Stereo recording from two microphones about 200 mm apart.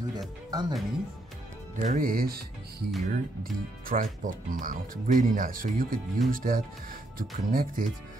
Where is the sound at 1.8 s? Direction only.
40° right (ahead or behind).